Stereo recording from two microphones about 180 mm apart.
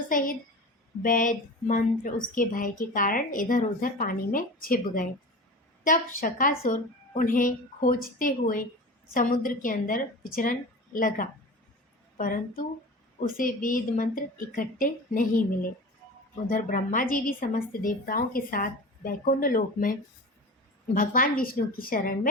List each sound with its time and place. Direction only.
0.1 s a woman's voice: 50° left (ahead or behind)